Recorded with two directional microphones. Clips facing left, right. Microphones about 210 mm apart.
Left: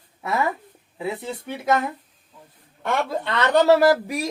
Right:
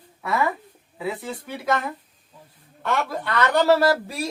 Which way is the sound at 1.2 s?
25° left (ahead or behind).